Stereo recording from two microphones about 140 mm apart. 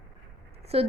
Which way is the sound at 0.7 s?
45° right (ahead or behind).